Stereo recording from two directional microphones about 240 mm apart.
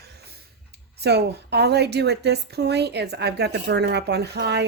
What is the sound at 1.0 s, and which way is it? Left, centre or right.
A woman's voice, right.